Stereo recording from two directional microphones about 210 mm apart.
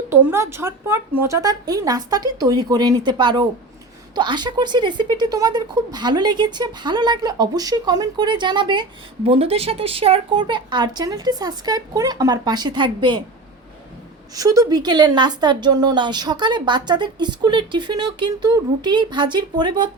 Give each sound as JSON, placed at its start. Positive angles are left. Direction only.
{"t": 0.1, "sound": "speech", "side_deg": -10}
{"t": 14.3, "sound": "speech", "side_deg": -15}